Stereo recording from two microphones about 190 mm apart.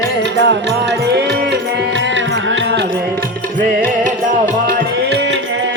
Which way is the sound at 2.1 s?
75° right (ahead or behind).